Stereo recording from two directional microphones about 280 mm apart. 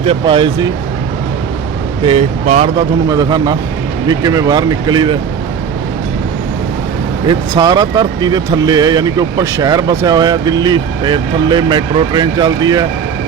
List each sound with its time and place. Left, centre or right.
0.0 s speech: centre
2.0 s speech: right
7.3 s speech: centre